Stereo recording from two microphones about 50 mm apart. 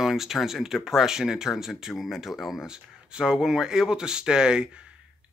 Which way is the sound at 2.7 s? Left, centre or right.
Centre.